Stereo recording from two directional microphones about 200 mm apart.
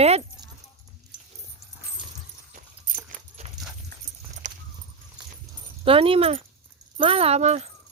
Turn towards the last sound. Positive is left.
turn(degrees=-35)  # may be behind; listen again after turning